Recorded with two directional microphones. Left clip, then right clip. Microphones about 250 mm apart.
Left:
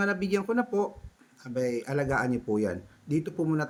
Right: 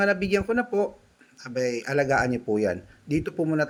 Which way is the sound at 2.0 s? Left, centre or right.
Centre.